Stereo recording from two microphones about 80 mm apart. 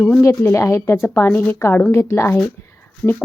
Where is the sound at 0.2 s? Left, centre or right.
Left.